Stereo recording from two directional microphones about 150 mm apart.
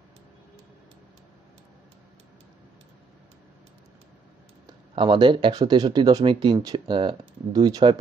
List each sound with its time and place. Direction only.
4.9 s speech: 30° right (ahead or behind)